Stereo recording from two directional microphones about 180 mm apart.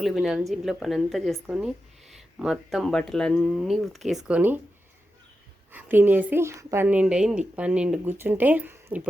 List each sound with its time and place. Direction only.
0.0 s speech: centre (ahead or behind)
5.7 s a woman's voice: 10° right (ahead or behind)